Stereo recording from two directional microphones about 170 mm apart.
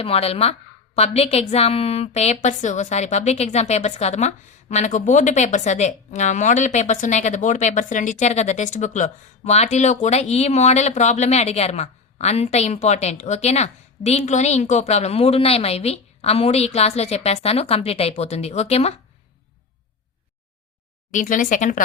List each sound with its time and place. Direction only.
0.0 s a woman's voice: 35° left (ahead or behind)
21.1 s speech: 50° left (ahead or behind)